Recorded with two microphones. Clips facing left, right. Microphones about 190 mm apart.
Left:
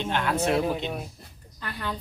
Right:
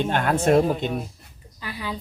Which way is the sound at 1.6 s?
5° right (ahead or behind).